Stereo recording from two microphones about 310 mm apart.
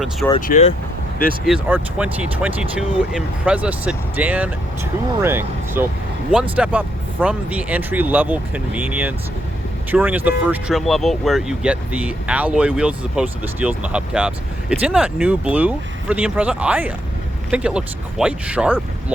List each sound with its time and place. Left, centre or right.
0.3 s speech: left
1.6 s speech: centre